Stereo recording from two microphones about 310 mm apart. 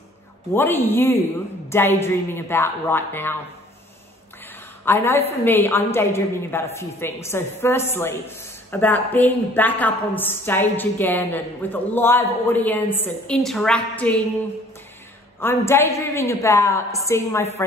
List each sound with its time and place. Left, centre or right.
0.6 s a woman's voice: centre
4.8 s a woman's voice: centre
15.4 s a woman's voice: centre